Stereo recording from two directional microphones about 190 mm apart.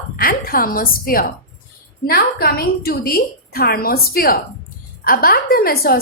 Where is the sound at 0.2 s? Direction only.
50° left (ahead or behind).